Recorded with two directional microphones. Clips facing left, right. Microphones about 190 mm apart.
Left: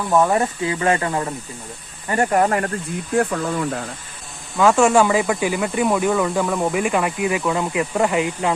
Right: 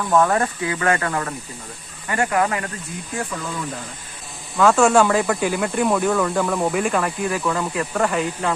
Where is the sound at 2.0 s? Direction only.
35° left (ahead or behind).